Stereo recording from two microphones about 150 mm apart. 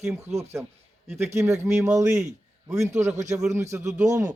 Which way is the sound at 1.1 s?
15° right (ahead or behind).